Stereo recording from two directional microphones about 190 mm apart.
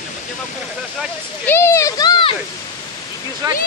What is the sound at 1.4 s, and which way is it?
Speech, 15° left (ahead or behind).